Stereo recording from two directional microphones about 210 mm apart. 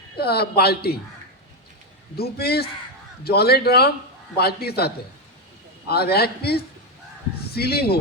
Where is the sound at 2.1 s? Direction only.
50° left (ahead or behind).